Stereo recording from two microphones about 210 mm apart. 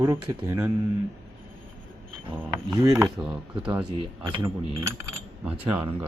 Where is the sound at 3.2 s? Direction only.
15° right (ahead or behind).